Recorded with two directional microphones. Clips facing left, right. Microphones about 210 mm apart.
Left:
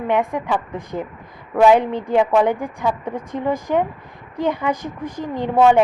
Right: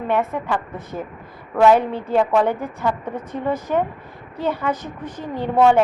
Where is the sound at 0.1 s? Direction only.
15° left (ahead or behind).